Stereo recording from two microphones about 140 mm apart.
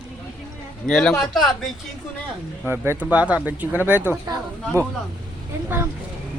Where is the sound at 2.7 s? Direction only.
15° right (ahead or behind).